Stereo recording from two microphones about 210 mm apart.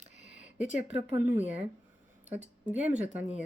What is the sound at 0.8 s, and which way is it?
Speech, 30° right (ahead or behind).